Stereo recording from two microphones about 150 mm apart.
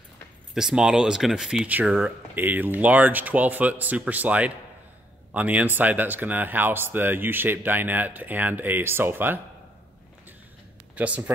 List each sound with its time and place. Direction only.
0.6 s speech: 5° right (ahead or behind)
11.0 s speech: 10° right (ahead or behind)